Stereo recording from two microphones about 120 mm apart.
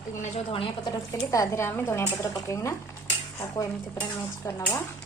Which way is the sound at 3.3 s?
30° left (ahead or behind).